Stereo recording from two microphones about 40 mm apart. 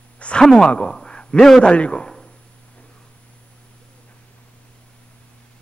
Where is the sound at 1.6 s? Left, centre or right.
Left.